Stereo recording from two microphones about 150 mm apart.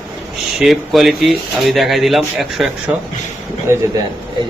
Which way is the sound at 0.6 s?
Centre (ahead or behind).